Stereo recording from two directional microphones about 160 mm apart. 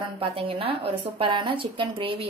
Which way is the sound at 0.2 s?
35° right (ahead or behind).